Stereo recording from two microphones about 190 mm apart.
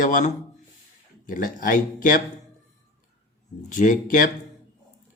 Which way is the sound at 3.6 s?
45° left (ahead or behind).